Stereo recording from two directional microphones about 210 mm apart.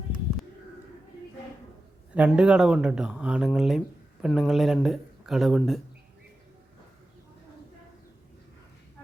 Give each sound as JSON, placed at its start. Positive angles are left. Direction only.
{"t": 2.1, "sound": "speech", "side_deg": -5}